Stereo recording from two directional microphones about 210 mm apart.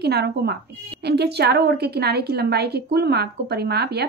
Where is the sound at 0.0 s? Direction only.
50° right (ahead or behind).